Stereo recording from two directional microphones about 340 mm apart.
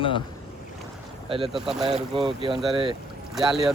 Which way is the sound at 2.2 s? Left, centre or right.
Centre.